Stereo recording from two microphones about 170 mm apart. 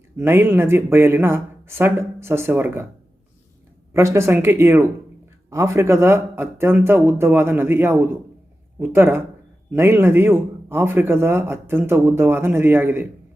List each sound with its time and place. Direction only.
0.2 s speech: 15° right (ahead or behind)
3.9 s speech: 15° right (ahead or behind)